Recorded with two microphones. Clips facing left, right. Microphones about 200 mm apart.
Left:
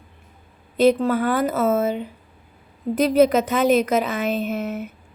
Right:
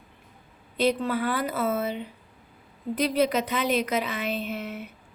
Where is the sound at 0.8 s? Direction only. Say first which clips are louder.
Left 7 dB; 45° left (ahead or behind).